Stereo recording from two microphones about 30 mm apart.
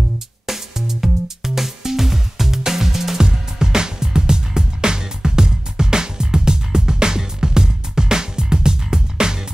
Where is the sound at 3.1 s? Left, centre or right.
Right.